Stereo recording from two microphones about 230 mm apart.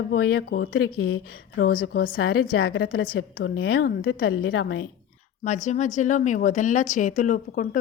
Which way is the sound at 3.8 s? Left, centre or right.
Left.